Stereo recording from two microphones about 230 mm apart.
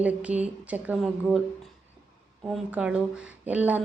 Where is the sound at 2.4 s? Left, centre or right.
Centre.